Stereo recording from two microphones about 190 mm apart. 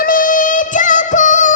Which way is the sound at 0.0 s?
45° left (ahead or behind).